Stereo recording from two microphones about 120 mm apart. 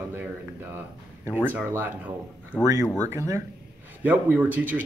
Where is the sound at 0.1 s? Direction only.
15° right (ahead or behind).